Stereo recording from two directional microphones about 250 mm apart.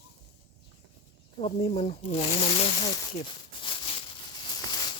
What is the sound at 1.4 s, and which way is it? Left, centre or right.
Speech, left.